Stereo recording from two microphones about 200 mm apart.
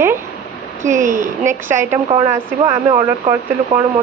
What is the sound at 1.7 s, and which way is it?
Speech, 15° right (ahead or behind).